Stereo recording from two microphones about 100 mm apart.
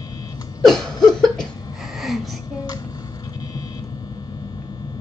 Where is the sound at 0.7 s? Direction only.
5° left (ahead or behind).